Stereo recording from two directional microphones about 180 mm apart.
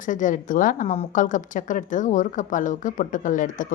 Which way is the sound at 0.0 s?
45° left (ahead or behind).